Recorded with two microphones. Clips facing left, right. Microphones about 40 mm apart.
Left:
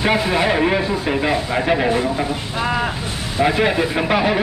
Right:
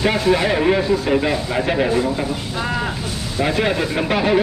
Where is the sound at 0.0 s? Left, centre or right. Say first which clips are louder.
Even; centre.